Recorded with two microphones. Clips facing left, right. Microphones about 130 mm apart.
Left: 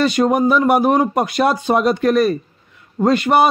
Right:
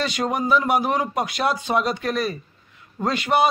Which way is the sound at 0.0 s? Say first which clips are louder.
Left 9 dB; 50° left (ahead or behind).